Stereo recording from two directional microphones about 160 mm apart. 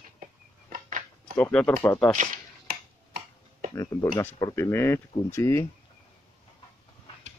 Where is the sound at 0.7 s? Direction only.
55° right (ahead or behind).